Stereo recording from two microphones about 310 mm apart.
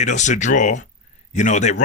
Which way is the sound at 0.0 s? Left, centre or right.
Left.